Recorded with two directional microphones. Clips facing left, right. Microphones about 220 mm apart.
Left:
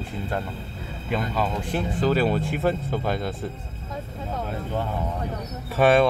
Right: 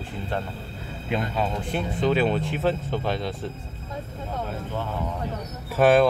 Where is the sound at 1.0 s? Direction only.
Centre (ahead or behind).